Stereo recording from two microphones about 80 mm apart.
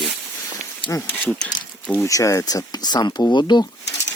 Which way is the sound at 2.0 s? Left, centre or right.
Left.